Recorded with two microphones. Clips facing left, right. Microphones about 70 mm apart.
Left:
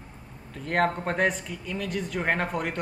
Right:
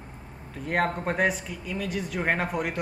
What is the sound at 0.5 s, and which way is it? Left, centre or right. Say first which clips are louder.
Speech: left 1 dB; centre.